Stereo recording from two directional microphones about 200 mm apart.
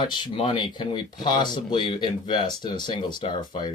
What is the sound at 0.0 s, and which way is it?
Speech, 20° left (ahead or behind).